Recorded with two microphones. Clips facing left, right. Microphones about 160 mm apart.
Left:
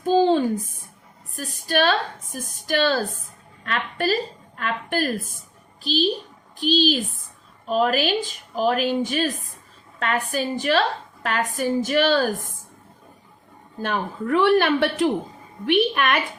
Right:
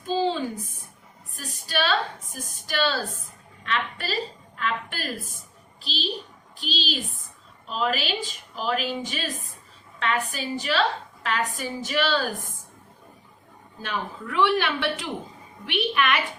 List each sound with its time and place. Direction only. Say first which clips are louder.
0.0 s a sound: left 7 dB; 50° left (ahead or behind)
1.4 s a woman's voice: left 6 dB; 50° left (ahead or behind)
6.6 s a woman's voice: left 11 dB; 45° left (ahead or behind)
13.8 s a woman's voice: left 6 dB; 50° left (ahead or behind)